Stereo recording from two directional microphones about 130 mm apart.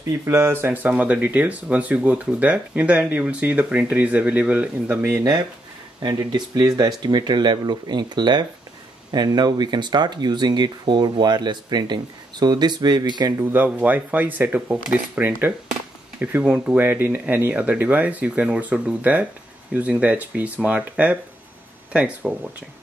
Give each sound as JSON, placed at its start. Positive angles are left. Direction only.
{"t": 0.3, "sound": "speech", "side_deg": -20}
{"t": 6.0, "sound": "speech", "side_deg": -30}
{"t": 13.4, "sound": "speech", "side_deg": -15}